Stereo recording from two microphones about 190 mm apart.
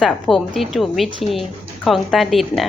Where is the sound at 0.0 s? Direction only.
Centre (ahead or behind).